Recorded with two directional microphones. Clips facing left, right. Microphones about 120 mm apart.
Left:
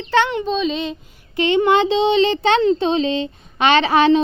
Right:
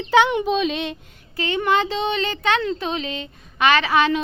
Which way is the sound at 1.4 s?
25° left (ahead or behind).